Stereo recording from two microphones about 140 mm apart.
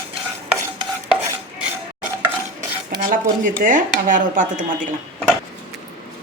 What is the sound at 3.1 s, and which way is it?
Dishes, 75° right (ahead or behind).